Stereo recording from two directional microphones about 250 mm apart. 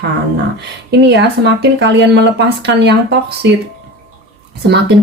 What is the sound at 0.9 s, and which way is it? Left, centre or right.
Speech, right.